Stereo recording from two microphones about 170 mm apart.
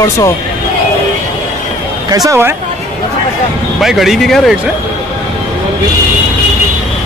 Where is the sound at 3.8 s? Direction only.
Centre (ahead or behind).